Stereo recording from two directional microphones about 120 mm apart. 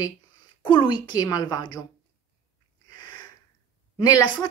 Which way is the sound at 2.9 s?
35° left (ahead or behind).